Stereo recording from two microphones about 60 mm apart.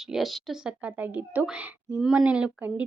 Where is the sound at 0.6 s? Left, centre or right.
Centre.